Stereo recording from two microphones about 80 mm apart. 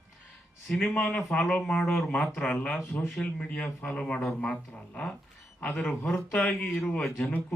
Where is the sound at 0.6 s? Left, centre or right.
Centre.